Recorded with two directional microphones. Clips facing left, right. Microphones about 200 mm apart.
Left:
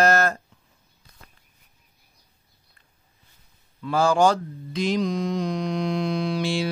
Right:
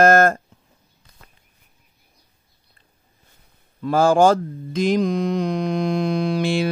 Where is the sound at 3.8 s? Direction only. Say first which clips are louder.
Right 4 dB; 50° right (ahead or behind).